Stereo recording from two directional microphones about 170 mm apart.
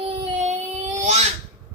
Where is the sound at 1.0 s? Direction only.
40° right (ahead or behind).